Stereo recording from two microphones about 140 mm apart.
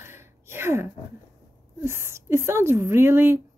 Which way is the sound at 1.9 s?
20° right (ahead or behind).